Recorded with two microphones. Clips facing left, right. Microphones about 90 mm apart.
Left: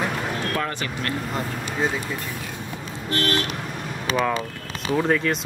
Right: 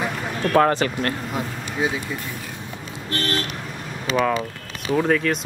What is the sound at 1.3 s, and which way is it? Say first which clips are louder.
Speech: even; 5° right (ahead or behind).